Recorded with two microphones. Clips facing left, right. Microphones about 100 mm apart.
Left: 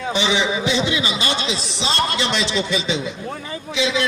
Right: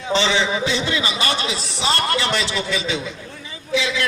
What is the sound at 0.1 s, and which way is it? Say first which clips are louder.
A man's voice: right 2 dB; 15° left (ahead or behind).